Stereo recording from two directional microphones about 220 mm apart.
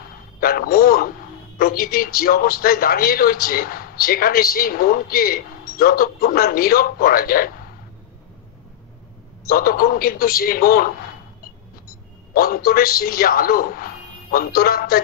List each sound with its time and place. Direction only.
0.4 s a sound: 40° left (ahead or behind)
1.6 s a man's voice: 40° left (ahead or behind)
9.5 s a man's voice: 40° left (ahead or behind)
12.4 s a man's voice: 40° left (ahead or behind)